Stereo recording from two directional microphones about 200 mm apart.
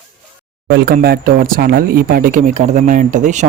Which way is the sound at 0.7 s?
55° right (ahead or behind).